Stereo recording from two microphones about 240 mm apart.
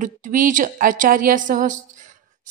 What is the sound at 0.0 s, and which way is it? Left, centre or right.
A woman's voice, right.